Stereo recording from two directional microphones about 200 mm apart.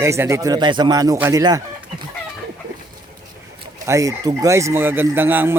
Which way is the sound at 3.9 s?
15° right (ahead or behind).